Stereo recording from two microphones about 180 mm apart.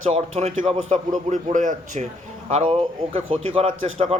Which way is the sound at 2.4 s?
35° right (ahead or behind).